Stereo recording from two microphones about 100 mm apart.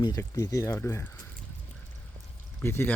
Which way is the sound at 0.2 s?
30° left (ahead or behind).